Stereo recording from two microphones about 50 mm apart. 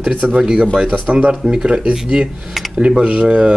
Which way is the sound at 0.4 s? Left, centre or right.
Centre.